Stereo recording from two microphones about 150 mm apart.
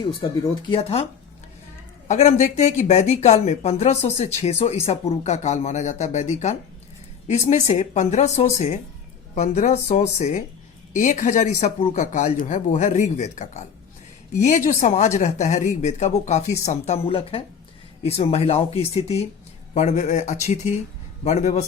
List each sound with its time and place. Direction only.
0.2 s speech: 35° left (ahead or behind)
2.0 s speech: 50° left (ahead or behind)
19.7 s speech: 55° left (ahead or behind)